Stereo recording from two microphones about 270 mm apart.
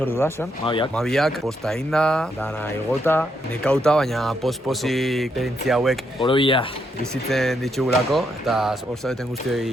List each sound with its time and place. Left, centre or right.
0.0 s speech: centre
0.9 s speech: centre
6.2 s speech: centre
7.3 s speech: centre